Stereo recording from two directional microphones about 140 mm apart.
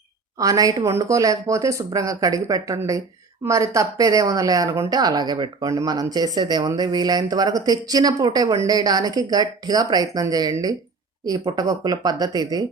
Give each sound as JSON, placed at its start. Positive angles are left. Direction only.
{"t": 0.3, "sound": "speech", "side_deg": -25}